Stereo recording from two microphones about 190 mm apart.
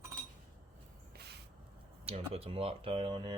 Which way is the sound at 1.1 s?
55° right (ahead or behind).